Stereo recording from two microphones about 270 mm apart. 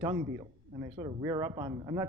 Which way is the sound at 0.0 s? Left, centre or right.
Centre.